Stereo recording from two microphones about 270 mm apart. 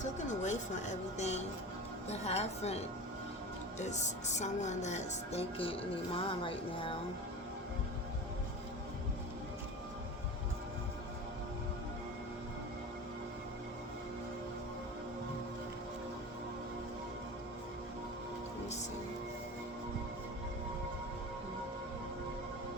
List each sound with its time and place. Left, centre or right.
0.0 s a woman's voice: left